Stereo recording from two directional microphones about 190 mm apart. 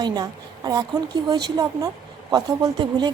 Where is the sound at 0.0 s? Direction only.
20° right (ahead or behind).